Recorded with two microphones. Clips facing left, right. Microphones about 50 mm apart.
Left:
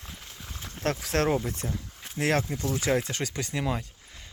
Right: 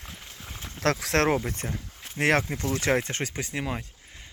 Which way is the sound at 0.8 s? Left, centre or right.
Right.